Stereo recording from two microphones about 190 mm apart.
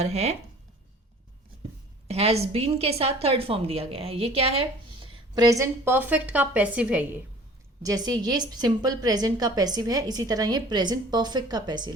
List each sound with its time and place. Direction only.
0.0 s speech: 35° right (ahead or behind)
2.0 s a woman's voice: 30° right (ahead or behind); by 7.0 s 5° right (ahead or behind)
7.8 s a woman's voice: 20° right (ahead or behind)